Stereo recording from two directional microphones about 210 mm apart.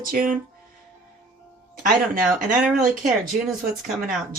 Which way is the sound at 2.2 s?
Centre (ahead or behind).